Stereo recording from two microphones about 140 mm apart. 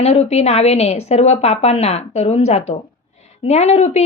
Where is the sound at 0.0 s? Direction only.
50° left (ahead or behind).